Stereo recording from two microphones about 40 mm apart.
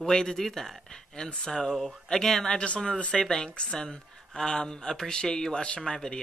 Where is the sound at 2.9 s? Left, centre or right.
Left.